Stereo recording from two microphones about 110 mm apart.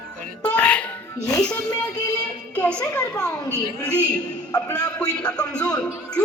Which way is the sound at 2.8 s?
30° left (ahead or behind).